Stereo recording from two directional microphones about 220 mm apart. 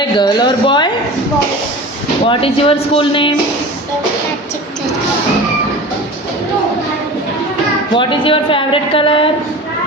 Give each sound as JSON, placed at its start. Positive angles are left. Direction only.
{"t": 0.2, "sound": "speech", "side_deg": 20}
{"t": 2.2, "sound": "a woman's voice", "side_deg": 25}
{"t": 7.9, "sound": "a woman's voice", "side_deg": 25}